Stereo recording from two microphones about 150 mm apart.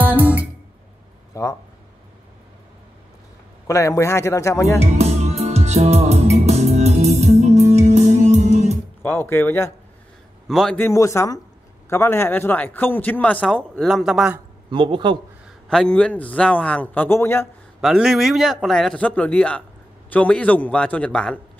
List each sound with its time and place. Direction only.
0.0 s music: 10° right (ahead or behind)
1.3 s speech: 20° left (ahead or behind)
3.6 s speech: 20° left (ahead or behind)
4.8 s music: 45° right (ahead or behind)
9.0 s speech: 15° left (ahead or behind)
10.5 s speech: 5° left (ahead or behind)
10.8 s speech: 20° left (ahead or behind); by 14.4 s 5° right (ahead or behind)
14.7 s a man's voice: 30° right (ahead or behind)
15.7 s speech: 5° left (ahead or behind)
17.7 s speech: 5° right (ahead or behind)